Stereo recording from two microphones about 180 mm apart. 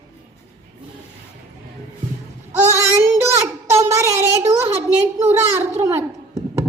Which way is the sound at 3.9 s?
15° right (ahead or behind).